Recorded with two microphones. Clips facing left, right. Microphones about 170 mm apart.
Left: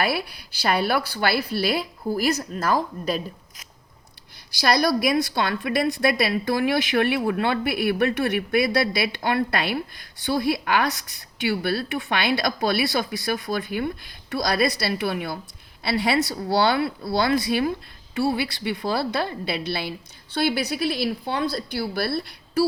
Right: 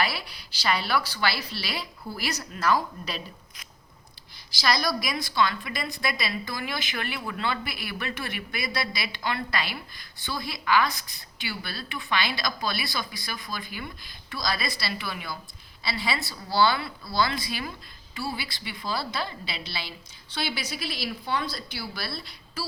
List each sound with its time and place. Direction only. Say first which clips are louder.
0.0 s a woman's voice: left 5 dB; 55° left (ahead or behind)
4.6 s a woman's voice: left 7 dB; 60° left (ahead or behind)